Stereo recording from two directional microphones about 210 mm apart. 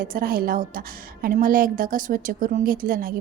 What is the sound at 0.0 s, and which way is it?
A woman's voice, 45° right (ahead or behind).